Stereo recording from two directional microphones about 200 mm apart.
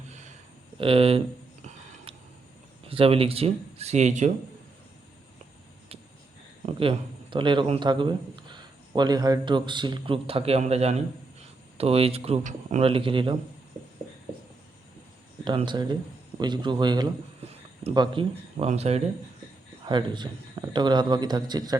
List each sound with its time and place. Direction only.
0.8 s a man's voice: 30° right (ahead or behind)
2.9 s speech: 30° right (ahead or behind)
6.7 s a man's voice: 25° right (ahead or behind)
15.4 s a man's voice: 20° right (ahead or behind)
17.4 s a sound: 30° right (ahead or behind)
17.8 s a man's voice: 25° right (ahead or behind)